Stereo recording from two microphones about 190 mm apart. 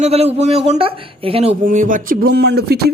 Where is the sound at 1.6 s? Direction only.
45° right (ahead or behind).